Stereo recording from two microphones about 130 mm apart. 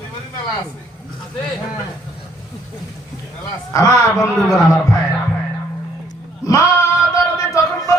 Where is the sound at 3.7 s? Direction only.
30° left (ahead or behind).